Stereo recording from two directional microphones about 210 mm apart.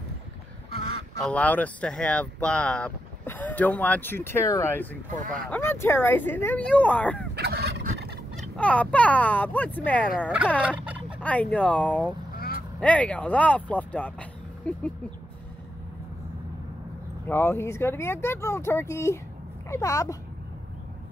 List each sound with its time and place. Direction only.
1.2 s speech: 5° left (ahead or behind)
7.3 s fowl: 50° right (ahead or behind)
8.4 s speech: 5° left (ahead or behind)
10.2 s speech: 5° right (ahead or behind)
11.1 s speech: 5° left (ahead or behind)
12.4 s quack: 45° left (ahead or behind)
12.8 s speech: 5° left (ahead or behind)
17.3 s speech: 10° left (ahead or behind)